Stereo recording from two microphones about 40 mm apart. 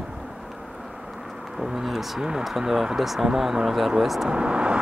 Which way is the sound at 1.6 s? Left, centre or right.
Centre.